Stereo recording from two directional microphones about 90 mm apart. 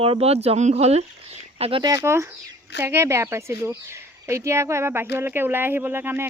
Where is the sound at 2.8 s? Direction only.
30° right (ahead or behind).